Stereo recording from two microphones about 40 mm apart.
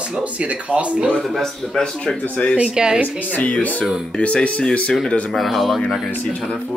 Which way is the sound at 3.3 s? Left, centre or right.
Left.